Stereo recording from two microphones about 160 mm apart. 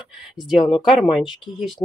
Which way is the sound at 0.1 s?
Centre (ahead or behind).